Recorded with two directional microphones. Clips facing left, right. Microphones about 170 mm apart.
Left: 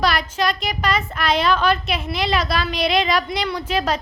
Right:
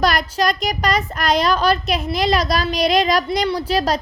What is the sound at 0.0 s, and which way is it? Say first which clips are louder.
A child's voice: right 2 dB; 45° right (ahead or behind).